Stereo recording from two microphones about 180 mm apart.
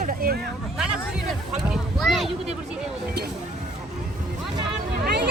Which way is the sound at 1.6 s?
Centre (ahead or behind).